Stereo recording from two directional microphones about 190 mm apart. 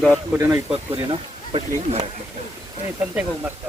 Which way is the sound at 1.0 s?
25° right (ahead or behind).